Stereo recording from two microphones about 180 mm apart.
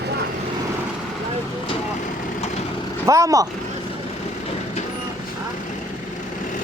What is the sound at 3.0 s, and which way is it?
Vehicle, 15° right (ahead or behind).